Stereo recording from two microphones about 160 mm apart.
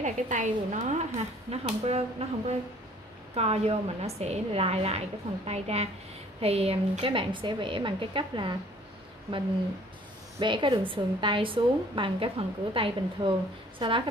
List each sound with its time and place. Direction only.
0.0 s a woman's voice: 50° right (ahead or behind)
3.3 s a woman's voice: 40° right (ahead or behind)
10.4 s a woman's voice: 30° right (ahead or behind)